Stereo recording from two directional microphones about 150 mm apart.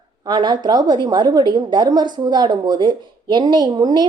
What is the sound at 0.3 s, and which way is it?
A woman's voice, 30° right (ahead or behind).